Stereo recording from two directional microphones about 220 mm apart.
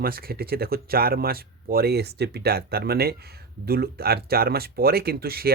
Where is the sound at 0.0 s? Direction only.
45° right (ahead or behind).